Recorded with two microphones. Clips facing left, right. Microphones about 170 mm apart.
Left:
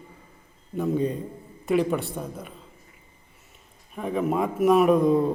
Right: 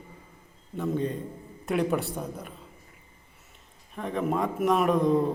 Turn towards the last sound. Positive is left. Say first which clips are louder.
# left 4 dB
turn(degrees=10)  # may be behind; listen again after turning